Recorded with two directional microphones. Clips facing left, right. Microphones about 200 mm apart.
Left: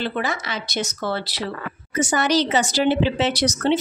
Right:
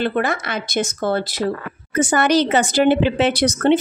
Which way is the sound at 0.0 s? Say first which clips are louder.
Right 5 dB; 55° right (ahead or behind).